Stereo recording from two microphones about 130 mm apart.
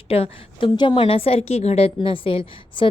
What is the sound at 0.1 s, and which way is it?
A woman's voice, 45° left (ahead or behind).